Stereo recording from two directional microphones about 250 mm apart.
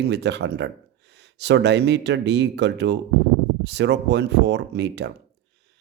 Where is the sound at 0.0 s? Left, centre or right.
Right.